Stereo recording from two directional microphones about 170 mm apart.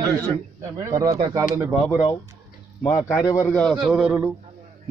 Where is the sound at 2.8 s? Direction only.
20° left (ahead or behind).